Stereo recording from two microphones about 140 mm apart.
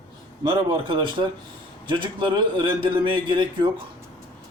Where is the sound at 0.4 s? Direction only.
35° right (ahead or behind).